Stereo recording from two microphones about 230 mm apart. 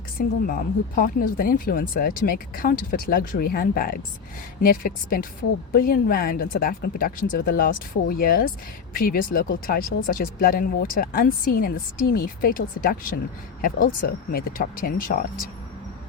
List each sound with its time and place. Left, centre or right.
0.2 s speech: left